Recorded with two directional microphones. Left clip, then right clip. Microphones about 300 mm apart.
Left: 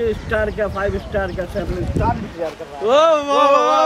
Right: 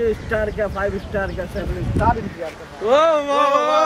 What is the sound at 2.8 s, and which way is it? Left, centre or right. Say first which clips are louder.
Speech: left 2 dB; centre.